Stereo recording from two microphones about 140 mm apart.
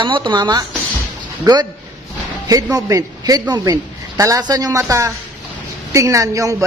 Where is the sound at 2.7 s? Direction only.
25° right (ahead or behind).